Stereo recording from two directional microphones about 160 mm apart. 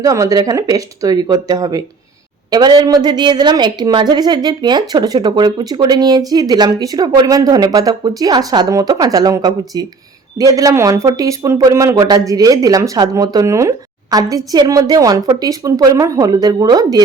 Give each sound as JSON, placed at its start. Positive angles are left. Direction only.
{"t": 0.0, "sound": "a woman's voice", "side_deg": -20}